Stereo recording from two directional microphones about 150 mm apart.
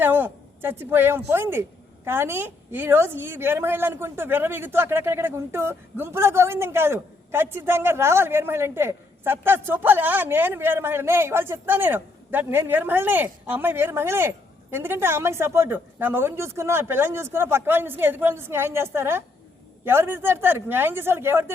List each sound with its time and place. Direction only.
0.0 s a woman's voice: 15° right (ahead or behind)